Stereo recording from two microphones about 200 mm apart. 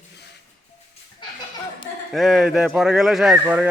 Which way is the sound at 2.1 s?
Centre (ahead or behind).